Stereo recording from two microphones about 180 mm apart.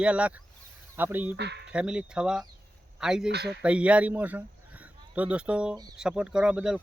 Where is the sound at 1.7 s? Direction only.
5° right (ahead or behind).